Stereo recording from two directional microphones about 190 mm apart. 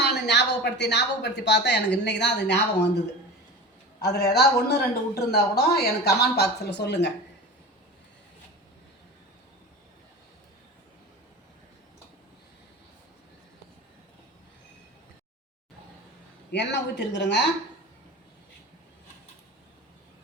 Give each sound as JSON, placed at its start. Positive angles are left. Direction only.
{"t": 0.0, "sound": "speech", "side_deg": 65}
{"t": 4.0, "sound": "speech", "side_deg": 60}
{"t": 16.5, "sound": "speech", "side_deg": 65}